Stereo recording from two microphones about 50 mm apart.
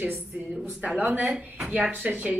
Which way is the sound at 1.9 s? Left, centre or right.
Right.